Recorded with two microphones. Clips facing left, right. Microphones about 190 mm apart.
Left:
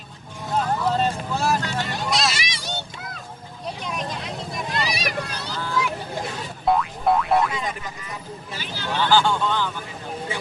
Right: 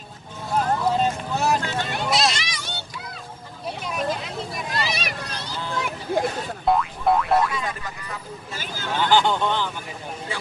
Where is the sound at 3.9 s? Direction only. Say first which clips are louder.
Right 3 dB; 5° right (ahead or behind).